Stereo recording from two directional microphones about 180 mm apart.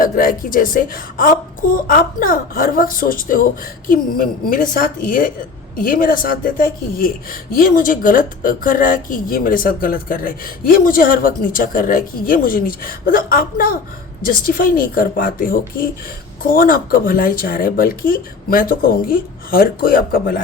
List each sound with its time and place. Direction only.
0.0 s speech: 50° left (ahead or behind)